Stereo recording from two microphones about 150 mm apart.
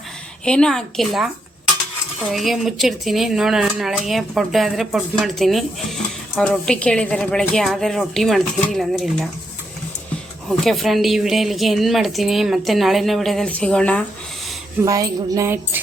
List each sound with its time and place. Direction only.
0.4 s a woman's voice: 5° left (ahead or behind)
2.3 s a woman's voice: centre (ahead or behind)
10.6 s a woman's voice: centre (ahead or behind)
14.8 s a sound: 20° right (ahead or behind)